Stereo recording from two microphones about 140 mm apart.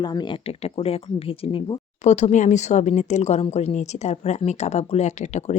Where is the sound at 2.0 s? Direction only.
55° left (ahead or behind).